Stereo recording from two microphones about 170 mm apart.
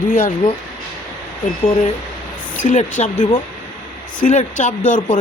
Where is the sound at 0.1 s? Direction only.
50° left (ahead or behind).